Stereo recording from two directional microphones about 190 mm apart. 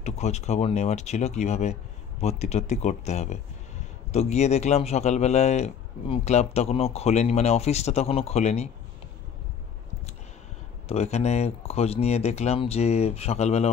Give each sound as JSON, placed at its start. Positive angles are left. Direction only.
{"t": 0.0, "sound": "a man's voice", "side_deg": 35}
{"t": 10.9, "sound": "a man's voice", "side_deg": 35}